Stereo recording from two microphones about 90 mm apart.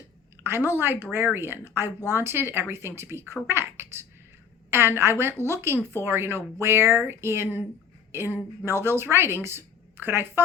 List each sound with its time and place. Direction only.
0.4 s a woman's voice: 25° right (ahead or behind)